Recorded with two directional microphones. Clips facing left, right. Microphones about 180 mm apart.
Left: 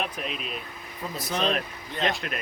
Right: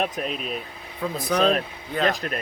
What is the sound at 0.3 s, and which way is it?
Speech, 40° right (ahead or behind).